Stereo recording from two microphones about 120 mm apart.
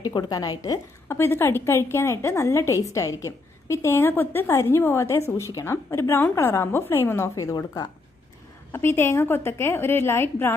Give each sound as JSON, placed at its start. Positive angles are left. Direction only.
{"t": 0.0, "sound": "speech", "side_deg": 35}
{"t": 1.0, "sound": "a woman's voice", "side_deg": 20}
{"t": 8.7, "sound": "a woman's voice", "side_deg": 20}